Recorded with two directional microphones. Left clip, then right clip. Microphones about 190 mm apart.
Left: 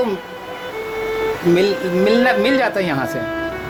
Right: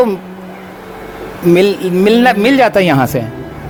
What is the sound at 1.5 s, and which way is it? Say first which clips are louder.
Speech: right 8 dB; 40° right (ahead or behind).